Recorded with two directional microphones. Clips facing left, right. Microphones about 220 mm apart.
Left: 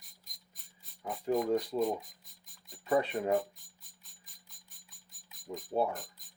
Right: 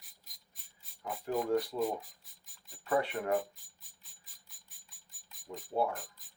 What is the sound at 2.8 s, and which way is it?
Speech, 20° left (ahead or behind).